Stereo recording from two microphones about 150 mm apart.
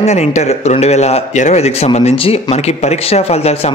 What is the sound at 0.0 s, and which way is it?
Speech, 45° left (ahead or behind).